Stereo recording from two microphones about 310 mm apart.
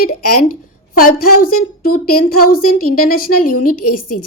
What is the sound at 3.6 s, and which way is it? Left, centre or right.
Speech, left.